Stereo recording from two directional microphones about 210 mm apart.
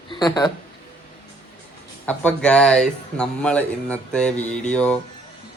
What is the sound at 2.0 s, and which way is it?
Speech, 5° left (ahead or behind).